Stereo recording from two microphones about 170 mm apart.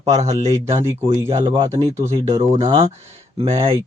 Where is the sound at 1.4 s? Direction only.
30° right (ahead or behind).